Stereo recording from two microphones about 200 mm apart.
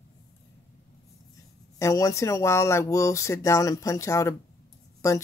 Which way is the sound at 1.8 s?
15° left (ahead or behind).